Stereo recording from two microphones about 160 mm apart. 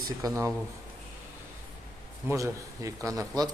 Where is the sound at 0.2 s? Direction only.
20° right (ahead or behind).